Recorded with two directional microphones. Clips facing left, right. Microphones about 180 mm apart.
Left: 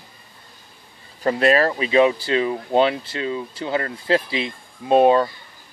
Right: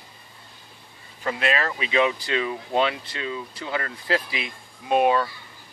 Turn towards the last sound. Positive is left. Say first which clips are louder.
# left 6 dB
turn(degrees=30)  # may be behind; listen again after turning